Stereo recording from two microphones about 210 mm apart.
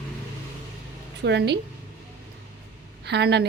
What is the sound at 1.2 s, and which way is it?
Speech, 55° right (ahead or behind).